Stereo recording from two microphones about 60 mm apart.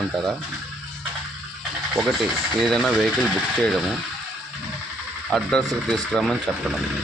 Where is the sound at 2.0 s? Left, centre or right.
Centre.